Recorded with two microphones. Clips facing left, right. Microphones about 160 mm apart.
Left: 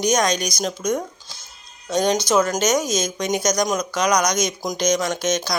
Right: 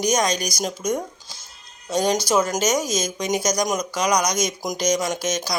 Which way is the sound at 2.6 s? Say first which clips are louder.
Left 2 dB; 30° right (ahead or behind).